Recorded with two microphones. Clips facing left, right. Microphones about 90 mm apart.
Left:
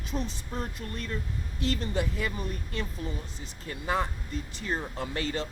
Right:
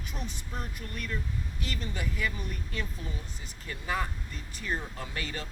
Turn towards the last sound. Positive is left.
turn(degrees=30)  # may be behind; listen again after turning